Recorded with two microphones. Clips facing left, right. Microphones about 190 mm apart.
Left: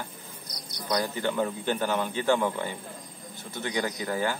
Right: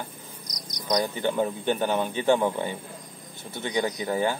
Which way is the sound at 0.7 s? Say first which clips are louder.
Right 3 dB; 15° right (ahead or behind).